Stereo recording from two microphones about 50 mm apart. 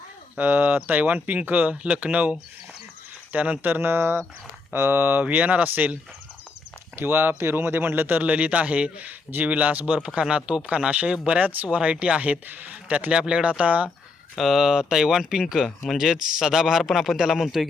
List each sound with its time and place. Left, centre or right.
0.3 s speech: right
1.7 s speech: right
3.7 s speech: right
5.2 s speech: right
6.9 s speech: right
8.2 s speech: right
10.1 s speech: centre
11.3 s speech: right
14.3 s a man's voice: centre